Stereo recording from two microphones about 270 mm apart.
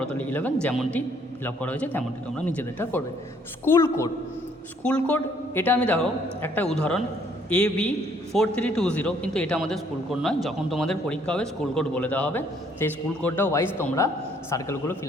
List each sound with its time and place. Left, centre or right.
0.0 s a man's voice: centre